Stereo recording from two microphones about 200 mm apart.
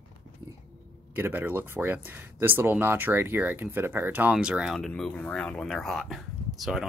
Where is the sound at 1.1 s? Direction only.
10° right (ahead or behind).